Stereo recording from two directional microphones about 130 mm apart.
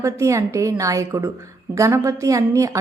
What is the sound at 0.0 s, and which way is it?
A woman's voice, 25° right (ahead or behind).